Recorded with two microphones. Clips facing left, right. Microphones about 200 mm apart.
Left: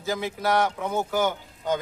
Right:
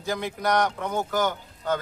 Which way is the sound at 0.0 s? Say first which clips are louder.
Even; 5° left (ahead or behind).